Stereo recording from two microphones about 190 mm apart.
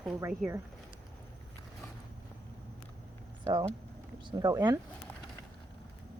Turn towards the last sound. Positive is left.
turn(degrees=-20)  # may be behind; listen again after turning